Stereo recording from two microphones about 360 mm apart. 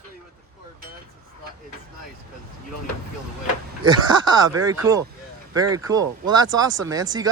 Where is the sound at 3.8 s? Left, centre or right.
Centre.